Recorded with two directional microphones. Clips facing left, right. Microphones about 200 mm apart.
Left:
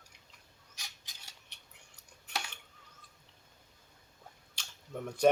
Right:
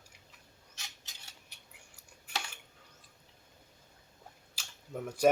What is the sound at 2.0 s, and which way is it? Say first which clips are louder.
Cutlery: even; 5° right (ahead or behind).